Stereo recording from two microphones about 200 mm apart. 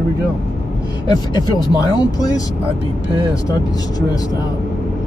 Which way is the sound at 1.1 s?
20° left (ahead or behind).